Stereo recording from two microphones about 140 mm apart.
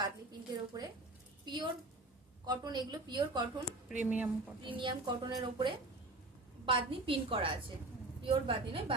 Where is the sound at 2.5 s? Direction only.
30° right (ahead or behind).